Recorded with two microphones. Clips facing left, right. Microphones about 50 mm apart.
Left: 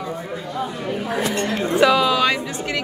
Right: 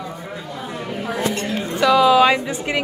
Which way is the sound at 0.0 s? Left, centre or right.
Centre.